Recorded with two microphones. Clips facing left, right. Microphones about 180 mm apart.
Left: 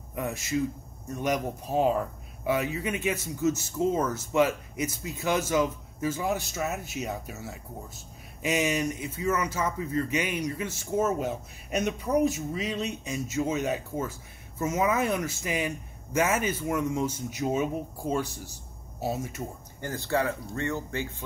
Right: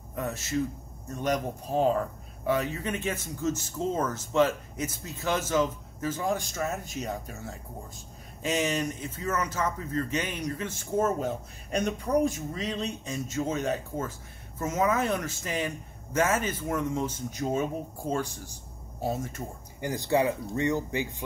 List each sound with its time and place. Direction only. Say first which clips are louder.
0.1 s speech: left 1 dB; 10° left (ahead or behind)
19.8 s speech: right 3 dB; 15° right (ahead or behind)